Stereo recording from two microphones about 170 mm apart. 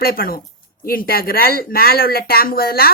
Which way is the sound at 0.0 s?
60° left (ahead or behind).